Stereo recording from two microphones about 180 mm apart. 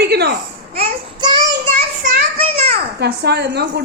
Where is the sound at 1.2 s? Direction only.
25° right (ahead or behind).